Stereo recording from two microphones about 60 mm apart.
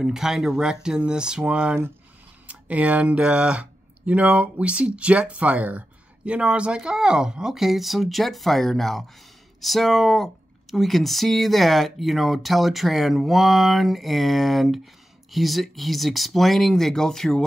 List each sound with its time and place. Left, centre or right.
0.0 s speech: centre